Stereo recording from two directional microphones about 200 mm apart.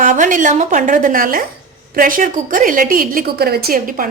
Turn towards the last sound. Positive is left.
turn(degrees=-45)  # may be behind; listen again after turning